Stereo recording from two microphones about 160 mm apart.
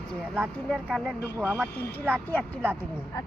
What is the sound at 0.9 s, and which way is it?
Speech, centre (ahead or behind).